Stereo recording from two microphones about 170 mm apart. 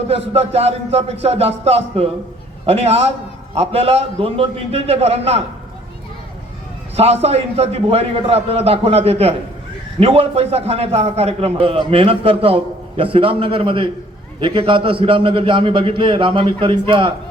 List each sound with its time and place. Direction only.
0.1 s a man's voice: 35° right (ahead or behind)
6.9 s a man's voice: 35° right (ahead or behind)